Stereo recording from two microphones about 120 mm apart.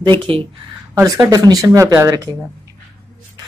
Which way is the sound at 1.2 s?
30° right (ahead or behind).